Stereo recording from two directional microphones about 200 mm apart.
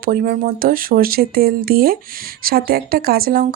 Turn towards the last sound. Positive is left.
turn(degrees=-45)  # may be behind; listen again after turning